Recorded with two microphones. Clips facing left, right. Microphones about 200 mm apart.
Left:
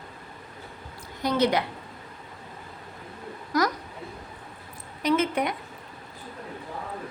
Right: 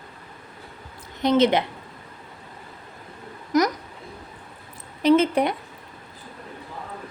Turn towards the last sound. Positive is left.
turn(degrees=-30)  # may be behind; listen again after turning